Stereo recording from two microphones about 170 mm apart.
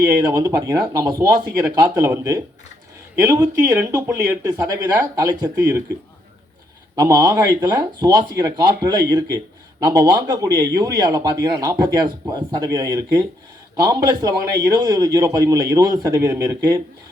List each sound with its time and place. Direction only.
0.0 s a man's voice: 20° right (ahead or behind)
4.4 s a man's voice: 25° right (ahead or behind)
7.0 s a man's voice: 20° right (ahead or behind)